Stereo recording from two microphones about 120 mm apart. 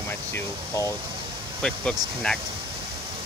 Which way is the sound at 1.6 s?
5° left (ahead or behind).